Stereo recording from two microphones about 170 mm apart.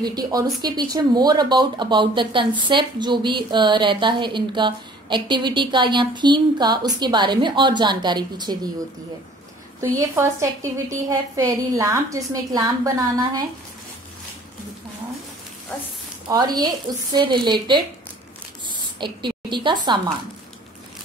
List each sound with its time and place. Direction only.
0.0 s speech: 25° right (ahead or behind)
9.8 s a woman's voice: 15° right (ahead or behind)
16.3 s speech: 25° right (ahead or behind)
18.7 s spray: 25° right (ahead or behind)